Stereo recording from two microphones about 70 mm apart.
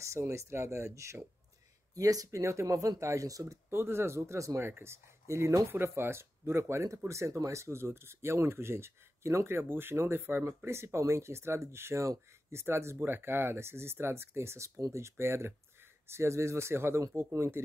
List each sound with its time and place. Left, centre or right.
0.0 s speech: right
2.0 s speech: right
3.7 s speech: right
5.7 s speech: right